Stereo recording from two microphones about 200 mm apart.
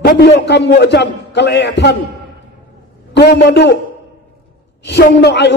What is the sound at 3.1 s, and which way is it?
Speech, 55° left (ahead or behind).